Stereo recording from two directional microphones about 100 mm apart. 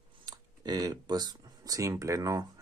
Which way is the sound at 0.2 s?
40° right (ahead or behind).